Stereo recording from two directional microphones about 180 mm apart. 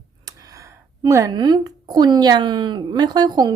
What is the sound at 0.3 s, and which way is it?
Speech, 15° right (ahead or behind).